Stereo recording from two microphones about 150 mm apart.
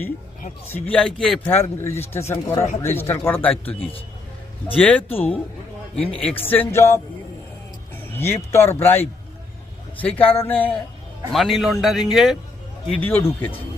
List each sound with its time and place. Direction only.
0.7 s a man's voice: 10° left (ahead or behind)
8.0 s a man's voice: 15° left (ahead or behind)
11.3 s speech: centre (ahead or behind)
12.9 s a man's voice: 10° left (ahead or behind)